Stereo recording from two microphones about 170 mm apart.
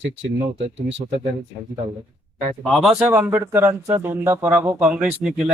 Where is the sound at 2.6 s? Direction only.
Centre (ahead or behind).